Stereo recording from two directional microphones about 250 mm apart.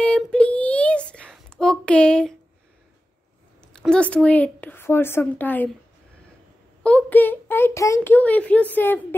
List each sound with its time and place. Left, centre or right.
0.0 s child singing: centre
3.6 s a woman's voice: centre
6.8 s a child's voice: centre